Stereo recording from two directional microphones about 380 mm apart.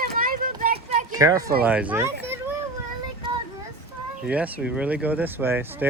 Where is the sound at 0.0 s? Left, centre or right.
Right.